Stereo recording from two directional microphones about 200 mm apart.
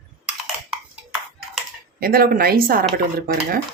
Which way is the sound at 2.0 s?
45° right (ahead or behind).